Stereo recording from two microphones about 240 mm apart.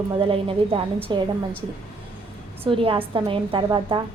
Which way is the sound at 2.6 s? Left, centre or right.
Right.